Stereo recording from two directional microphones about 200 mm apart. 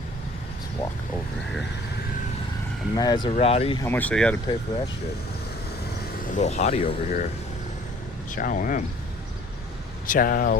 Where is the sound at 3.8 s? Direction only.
10° left (ahead or behind).